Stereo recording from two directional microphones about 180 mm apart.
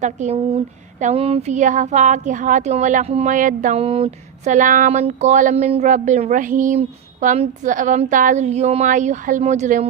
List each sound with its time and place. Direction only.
0.0 s speech: 40° right (ahead or behind)
4.5 s a woman's voice: 45° right (ahead or behind)